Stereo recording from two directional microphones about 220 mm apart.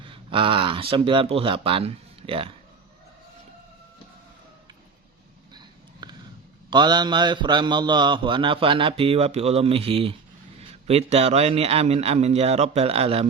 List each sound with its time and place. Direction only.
0.0 s speech: 25° right (ahead or behind)
5.5 s a sound: 20° right (ahead or behind)
6.7 s a man's voice: 20° right (ahead or behind)